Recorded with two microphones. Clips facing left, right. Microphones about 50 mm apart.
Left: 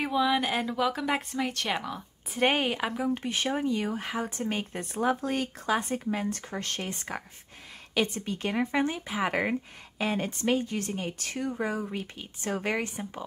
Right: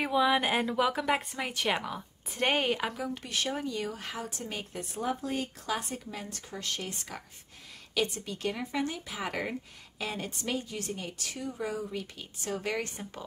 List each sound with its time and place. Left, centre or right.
0.0 s a woman's voice: centre
2.9 s speech: left
5.0 s speech: left
5.7 s speech: left
12.8 s speech: centre